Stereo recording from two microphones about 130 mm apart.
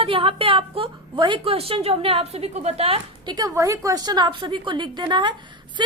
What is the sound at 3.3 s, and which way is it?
A woman's voice, 30° right (ahead or behind).